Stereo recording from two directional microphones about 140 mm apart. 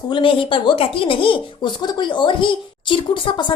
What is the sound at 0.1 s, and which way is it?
Speech, 35° left (ahead or behind).